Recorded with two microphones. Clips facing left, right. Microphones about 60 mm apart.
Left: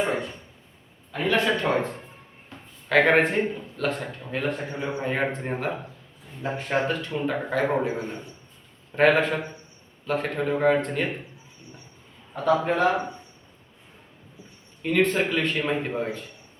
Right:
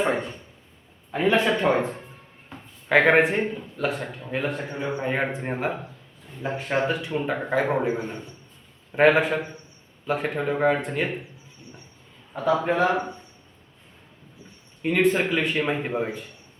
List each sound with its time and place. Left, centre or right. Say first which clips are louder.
0.0 s a sound: right 2 dB; right
1.1 s a man's voice: right 2 dB; centre
7.9 s speech: right 2 dB; right
8.9 s a man's voice: right 1 dB; centre
12.3 s a man's voice: even; centre
14.8 s a man's voice: right 1 dB; centre